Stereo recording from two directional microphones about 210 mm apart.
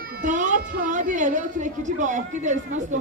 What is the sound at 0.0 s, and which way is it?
A woman's voice, 40° right (ahead or behind).